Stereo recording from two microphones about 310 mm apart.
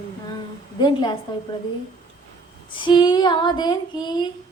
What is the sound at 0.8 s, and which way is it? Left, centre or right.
Female singing, centre.